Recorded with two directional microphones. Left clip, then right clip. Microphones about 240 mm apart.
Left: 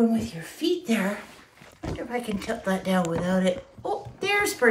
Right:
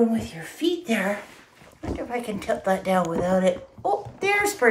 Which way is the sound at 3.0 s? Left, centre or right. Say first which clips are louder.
Right 4 dB; right.